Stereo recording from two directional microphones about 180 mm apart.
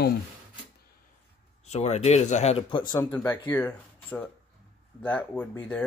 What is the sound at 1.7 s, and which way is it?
Speech, 40° left (ahead or behind).